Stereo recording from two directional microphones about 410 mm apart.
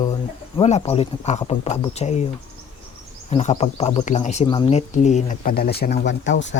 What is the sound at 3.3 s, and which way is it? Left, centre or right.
Speech, centre.